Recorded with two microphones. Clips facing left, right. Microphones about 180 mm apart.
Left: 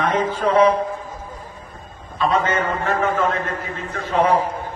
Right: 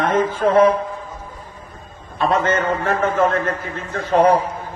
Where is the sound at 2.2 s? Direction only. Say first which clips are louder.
Right 1 dB; 45° right (ahead or behind).